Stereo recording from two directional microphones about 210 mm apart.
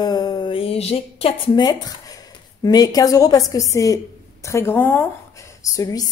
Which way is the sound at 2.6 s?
20° left (ahead or behind).